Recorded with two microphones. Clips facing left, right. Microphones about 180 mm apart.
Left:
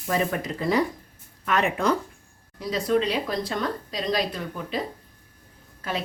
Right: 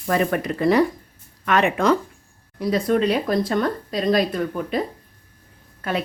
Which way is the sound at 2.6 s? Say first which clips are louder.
Right 4 dB; 55° right (ahead or behind).